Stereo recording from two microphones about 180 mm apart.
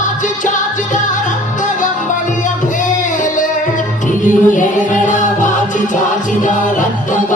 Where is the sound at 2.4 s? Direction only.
45° left (ahead or behind).